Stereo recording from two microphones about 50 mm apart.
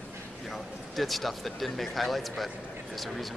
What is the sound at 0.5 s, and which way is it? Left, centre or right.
Speech, centre.